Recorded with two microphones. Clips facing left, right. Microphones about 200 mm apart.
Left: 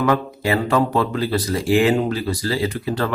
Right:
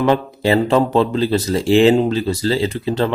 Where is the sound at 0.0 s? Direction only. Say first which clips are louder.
Right 3 dB; 25° right (ahead or behind).